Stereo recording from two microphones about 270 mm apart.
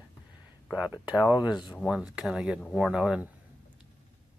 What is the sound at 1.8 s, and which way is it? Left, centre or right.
Speech, centre.